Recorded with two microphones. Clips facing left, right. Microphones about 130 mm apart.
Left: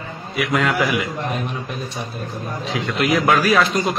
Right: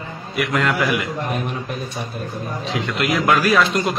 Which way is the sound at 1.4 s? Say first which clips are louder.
Right 1 dB; 50° right (ahead or behind).